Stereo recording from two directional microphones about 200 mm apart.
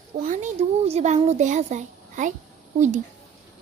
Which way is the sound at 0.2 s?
40° right (ahead or behind).